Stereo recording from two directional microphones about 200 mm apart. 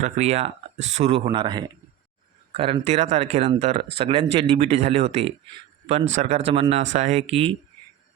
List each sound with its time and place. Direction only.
0.0 s speech: 35° right (ahead or behind)